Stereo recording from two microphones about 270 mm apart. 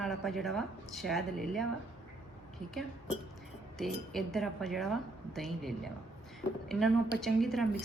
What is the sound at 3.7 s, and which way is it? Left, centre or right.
A woman's voice, centre.